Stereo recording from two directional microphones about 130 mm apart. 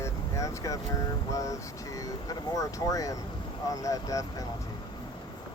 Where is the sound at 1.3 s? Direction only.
25° left (ahead or behind).